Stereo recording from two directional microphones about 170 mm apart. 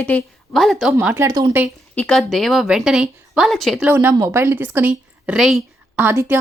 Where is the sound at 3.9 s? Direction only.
10° right (ahead or behind).